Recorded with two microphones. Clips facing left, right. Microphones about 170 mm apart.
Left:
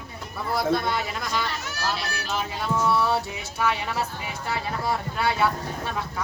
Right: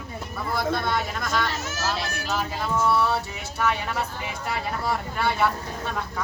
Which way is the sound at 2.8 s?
Centre (ahead or behind).